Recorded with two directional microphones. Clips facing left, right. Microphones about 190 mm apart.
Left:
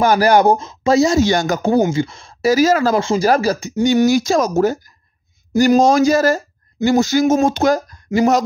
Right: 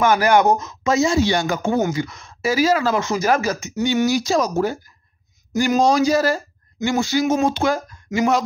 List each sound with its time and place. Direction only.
0.0 s speech: 35° left (ahead or behind)